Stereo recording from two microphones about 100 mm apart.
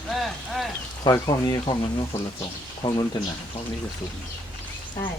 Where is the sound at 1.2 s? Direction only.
50° left (ahead or behind).